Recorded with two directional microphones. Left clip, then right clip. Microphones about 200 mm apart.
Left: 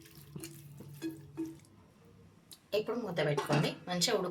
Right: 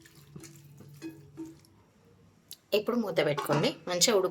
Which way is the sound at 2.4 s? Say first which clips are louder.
Right 5 dB; 55° right (ahead or behind).